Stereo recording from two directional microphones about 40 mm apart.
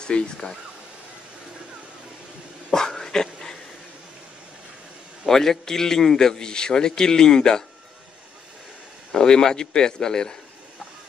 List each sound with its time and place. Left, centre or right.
0.0 s a man's voice: centre
2.7 s dog: centre
5.3 s a man's voice: centre
9.1 s a man's voice: centre